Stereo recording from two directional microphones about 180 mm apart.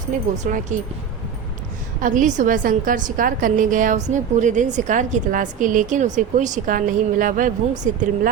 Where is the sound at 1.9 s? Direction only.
45° right (ahead or behind).